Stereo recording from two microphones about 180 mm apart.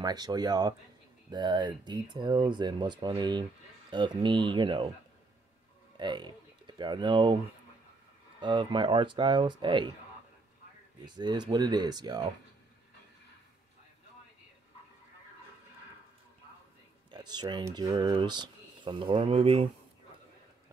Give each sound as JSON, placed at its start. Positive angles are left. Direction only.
{"t": 0.0, "sound": "speech", "side_deg": -20}
{"t": 5.9, "sound": "speech", "side_deg": -25}
{"t": 8.4, "sound": "speech", "side_deg": -25}
{"t": 11.1, "sound": "speech", "side_deg": -25}
{"t": 17.1, "sound": "speech", "side_deg": -25}